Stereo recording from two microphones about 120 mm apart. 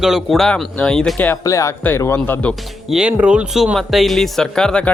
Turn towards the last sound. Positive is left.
turn(degrees=5)  # may be behind; listen again after turning